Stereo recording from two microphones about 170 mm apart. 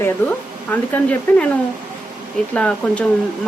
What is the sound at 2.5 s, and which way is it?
Speech, 5° left (ahead or behind).